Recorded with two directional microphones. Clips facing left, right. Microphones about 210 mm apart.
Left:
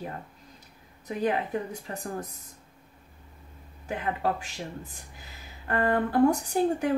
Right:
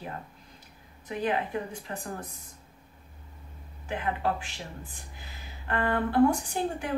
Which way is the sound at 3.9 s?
40° left (ahead or behind).